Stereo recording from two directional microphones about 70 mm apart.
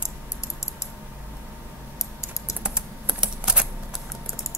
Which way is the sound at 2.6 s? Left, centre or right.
Centre.